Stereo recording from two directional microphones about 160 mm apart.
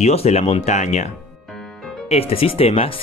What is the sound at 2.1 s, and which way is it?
Speech, 40° left (ahead or behind).